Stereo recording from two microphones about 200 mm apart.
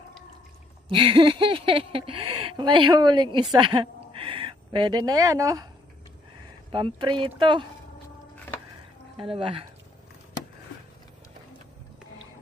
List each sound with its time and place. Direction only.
0.9 s speech: 25° right (ahead or behind)
6.7 s speech: 25° right (ahead or behind)
9.3 s speech: 25° right (ahead or behind)